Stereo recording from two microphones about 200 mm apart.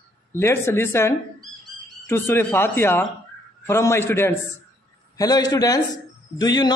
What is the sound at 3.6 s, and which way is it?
A man's voice, 10° left (ahead or behind).